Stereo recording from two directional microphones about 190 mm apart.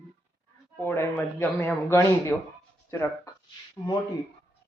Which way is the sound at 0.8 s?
15° left (ahead or behind).